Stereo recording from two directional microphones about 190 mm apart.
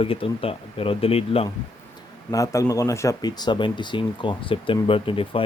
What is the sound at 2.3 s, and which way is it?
Speech, 15° left (ahead or behind).